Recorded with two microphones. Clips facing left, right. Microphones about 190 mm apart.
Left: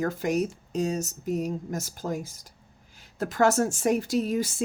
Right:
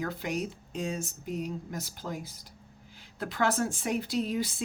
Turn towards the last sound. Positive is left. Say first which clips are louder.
# left 4 dB
turn(degrees=45)  # may be behind; listen again after turning